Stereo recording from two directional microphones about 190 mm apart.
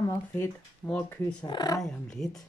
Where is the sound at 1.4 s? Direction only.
25° left (ahead or behind).